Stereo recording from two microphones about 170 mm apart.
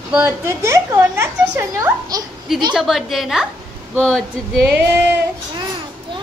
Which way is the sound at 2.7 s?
Centre (ahead or behind).